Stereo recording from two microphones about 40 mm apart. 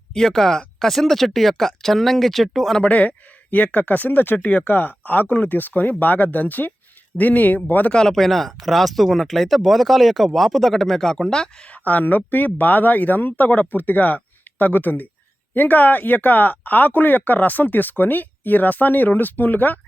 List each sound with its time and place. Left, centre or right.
0.1 s speech: centre
2.8 s speech: left
4.4 s speech: left
8.1 s speech: centre
11.6 s speech: left